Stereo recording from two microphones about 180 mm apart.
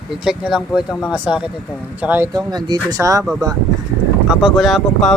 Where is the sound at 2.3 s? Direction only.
20° right (ahead or behind).